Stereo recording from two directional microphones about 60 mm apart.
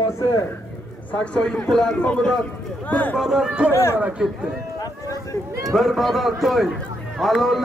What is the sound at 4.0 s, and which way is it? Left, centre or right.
Speech, centre.